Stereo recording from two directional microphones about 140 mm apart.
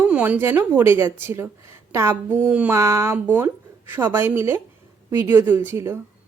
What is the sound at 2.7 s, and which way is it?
Speech, 20° right (ahead or behind).